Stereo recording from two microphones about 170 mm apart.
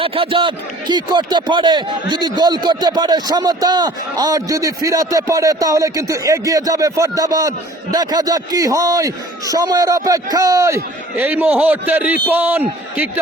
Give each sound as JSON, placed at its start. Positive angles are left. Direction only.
{"t": 0.0, "sound": "a man's voice", "side_deg": -30}